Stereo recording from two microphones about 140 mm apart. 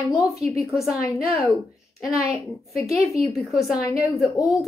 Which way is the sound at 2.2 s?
20° left (ahead or behind).